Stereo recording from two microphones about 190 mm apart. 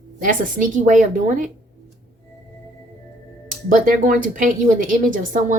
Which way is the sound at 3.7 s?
45° right (ahead or behind).